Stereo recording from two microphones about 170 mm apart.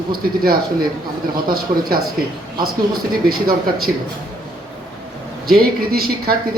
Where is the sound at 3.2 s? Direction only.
60° right (ahead or behind).